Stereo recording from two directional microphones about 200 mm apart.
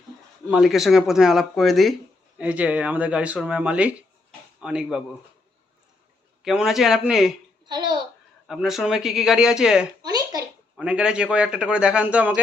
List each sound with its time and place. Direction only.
0.5 s a man's voice: centre (ahead or behind)
6.4 s a man's voice: centre (ahead or behind)
7.7 s a child's voice: 20° right (ahead or behind)
8.4 s a man's voice: centre (ahead or behind)
10.0 s a sound: 20° right (ahead or behind)
10.8 s a man's voice: 5° right (ahead or behind)